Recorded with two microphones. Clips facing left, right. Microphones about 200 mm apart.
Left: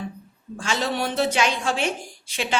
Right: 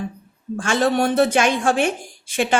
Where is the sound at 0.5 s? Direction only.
50° right (ahead or behind).